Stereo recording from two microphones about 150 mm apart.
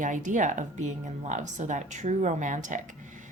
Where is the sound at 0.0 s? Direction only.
60° right (ahead or behind).